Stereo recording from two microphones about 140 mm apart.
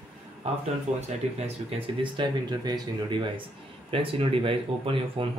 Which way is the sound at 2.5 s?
30° right (ahead or behind).